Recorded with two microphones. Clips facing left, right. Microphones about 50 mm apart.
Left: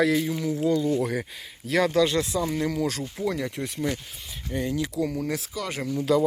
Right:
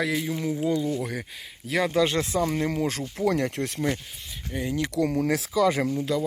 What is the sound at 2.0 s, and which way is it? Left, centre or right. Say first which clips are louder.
Speech: even; right.